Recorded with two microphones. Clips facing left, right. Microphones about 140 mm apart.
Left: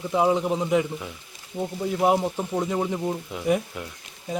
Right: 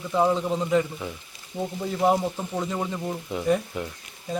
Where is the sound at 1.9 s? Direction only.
10° left (ahead or behind).